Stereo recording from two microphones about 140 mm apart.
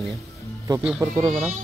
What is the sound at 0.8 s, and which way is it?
Speech, 10° right (ahead or behind).